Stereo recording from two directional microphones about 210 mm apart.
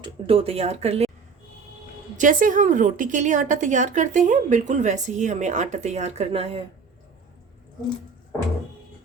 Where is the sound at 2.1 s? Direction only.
40° right (ahead or behind).